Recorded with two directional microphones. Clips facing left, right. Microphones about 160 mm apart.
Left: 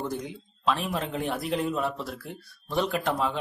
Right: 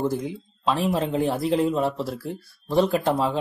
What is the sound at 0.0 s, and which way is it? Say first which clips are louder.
A man's voice: right 7 dB; 30° right (ahead or behind).